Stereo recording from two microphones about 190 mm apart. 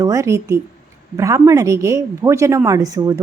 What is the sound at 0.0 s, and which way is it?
A woman's voice, 15° right (ahead or behind).